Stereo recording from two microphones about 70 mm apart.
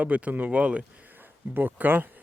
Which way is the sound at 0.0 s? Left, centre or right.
Right.